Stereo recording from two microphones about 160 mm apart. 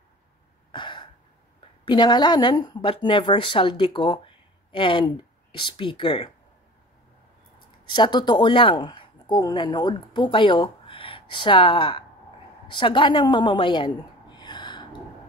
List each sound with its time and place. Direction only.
0.7 s throat clearing: 30° left (ahead or behind)
1.9 s speech: 30° left (ahead or behind)
7.9 s speech: 30° left (ahead or behind)
12.6 s a sound: 30° left (ahead or behind)